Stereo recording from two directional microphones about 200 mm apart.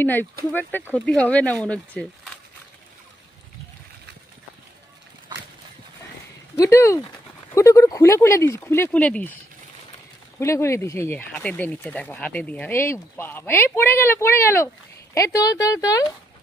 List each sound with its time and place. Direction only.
0.0 s speech: 10° left (ahead or behind)
6.5 s speech: 15° left (ahead or behind)
10.4 s speech: 15° left (ahead or behind)